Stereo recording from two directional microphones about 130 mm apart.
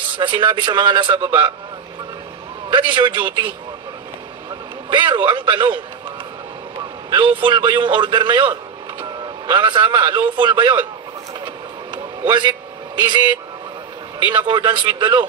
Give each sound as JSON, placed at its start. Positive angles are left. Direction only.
{"t": 0.1, "sound": "a man's voice", "side_deg": -40}
{"t": 2.7, "sound": "a man's voice", "side_deg": -40}
{"t": 4.8, "sound": "a man's voice", "side_deg": -40}
{"t": 6.8, "sound": "a man's voice", "side_deg": -35}
{"t": 11.4, "sound": "vehicle", "side_deg": -35}
{"t": 13.0, "sound": "a man's voice", "side_deg": -35}